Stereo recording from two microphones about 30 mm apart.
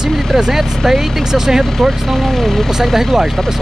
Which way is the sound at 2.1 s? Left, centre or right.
Centre.